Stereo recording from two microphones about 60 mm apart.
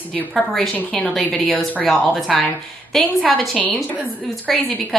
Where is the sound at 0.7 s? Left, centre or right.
Left.